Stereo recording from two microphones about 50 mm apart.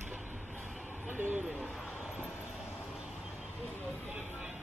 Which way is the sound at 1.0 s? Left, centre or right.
Right.